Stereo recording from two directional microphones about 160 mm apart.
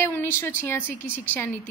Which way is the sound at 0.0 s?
15° left (ahead or behind).